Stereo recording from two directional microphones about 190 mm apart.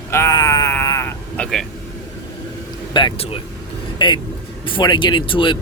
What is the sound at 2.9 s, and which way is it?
Speech, 25° left (ahead or behind).